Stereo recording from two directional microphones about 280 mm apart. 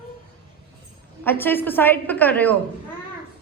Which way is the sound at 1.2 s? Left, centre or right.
Centre.